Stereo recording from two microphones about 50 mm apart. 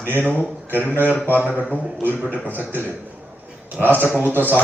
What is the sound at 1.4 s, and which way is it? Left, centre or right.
Speech, right.